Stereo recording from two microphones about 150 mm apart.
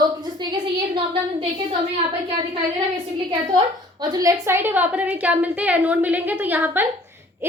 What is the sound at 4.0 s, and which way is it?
A woman's voice, 25° right (ahead or behind).